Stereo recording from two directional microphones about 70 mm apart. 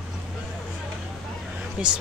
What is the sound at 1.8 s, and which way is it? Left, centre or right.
Speech, centre.